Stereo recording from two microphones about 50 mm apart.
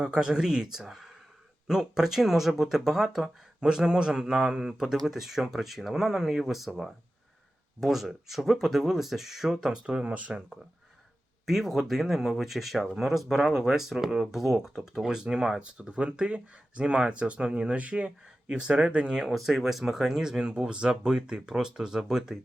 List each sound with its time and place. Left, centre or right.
0.0 s speech: centre
7.8 s speech: centre; by 10.4 s right
11.4 s speech: centre
15.6 s speech: centre
19.2 s speech: centre